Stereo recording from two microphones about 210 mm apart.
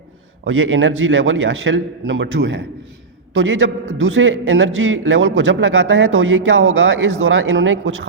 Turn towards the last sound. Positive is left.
turn(degrees=-65)  # may be behind; listen again after turning